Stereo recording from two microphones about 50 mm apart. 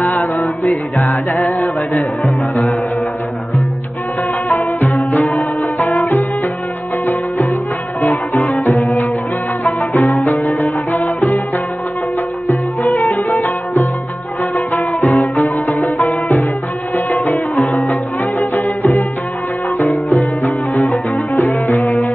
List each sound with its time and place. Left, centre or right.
0.4 s music: centre
2.0 s speech: left
4.5 s music: left
8.0 s music: left
10.0 s music: left
14.7 s music: left
18.4 s music: left